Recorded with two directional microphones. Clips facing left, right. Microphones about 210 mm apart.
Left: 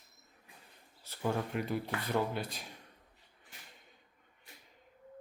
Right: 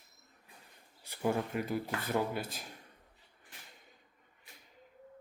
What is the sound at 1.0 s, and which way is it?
Speech, 10° right (ahead or behind).